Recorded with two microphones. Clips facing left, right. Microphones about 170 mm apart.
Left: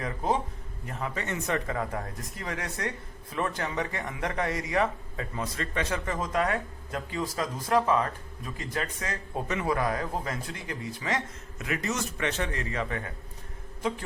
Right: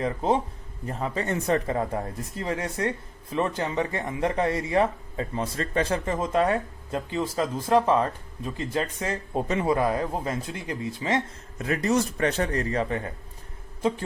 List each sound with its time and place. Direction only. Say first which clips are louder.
0.0 s speech: right 4 dB; 25° right (ahead or behind)